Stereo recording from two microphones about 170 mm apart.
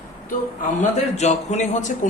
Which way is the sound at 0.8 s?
40° left (ahead or behind).